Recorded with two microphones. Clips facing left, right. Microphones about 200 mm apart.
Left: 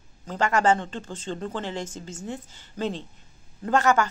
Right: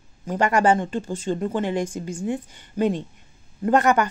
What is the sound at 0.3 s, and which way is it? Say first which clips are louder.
Speech: right 3 dB; 15° right (ahead or behind).